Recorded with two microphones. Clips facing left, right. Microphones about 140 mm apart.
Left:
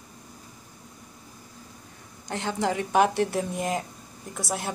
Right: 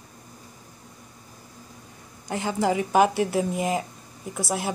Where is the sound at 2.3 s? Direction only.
5° right (ahead or behind).